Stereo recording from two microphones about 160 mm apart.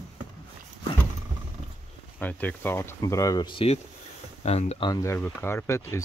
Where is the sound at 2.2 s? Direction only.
10° left (ahead or behind); by 3.7 s 30° left (ahead or behind).